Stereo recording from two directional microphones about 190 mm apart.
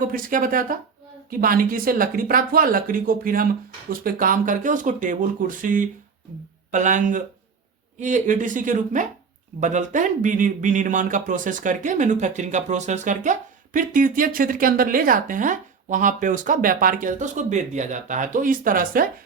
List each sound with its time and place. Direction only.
0.0 s a woman's voice: 45° right (ahead or behind)